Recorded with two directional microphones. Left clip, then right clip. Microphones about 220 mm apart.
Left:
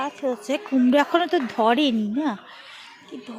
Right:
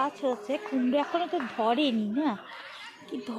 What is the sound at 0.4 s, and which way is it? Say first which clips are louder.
A woman's voice: left 7 dB; 50° left (ahead or behind).